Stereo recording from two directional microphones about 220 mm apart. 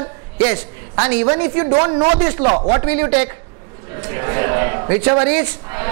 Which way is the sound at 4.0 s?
15° right (ahead or behind).